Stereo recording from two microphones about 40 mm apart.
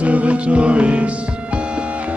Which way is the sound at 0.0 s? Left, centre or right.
Right.